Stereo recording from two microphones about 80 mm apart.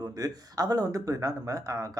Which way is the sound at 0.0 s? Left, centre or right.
Right.